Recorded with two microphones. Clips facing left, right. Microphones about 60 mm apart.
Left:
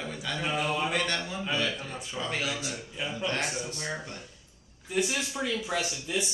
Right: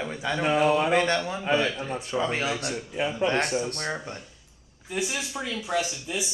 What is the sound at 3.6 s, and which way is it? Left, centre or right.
Speech, right.